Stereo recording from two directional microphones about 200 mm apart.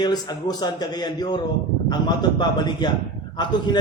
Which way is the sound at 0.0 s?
20° left (ahead or behind).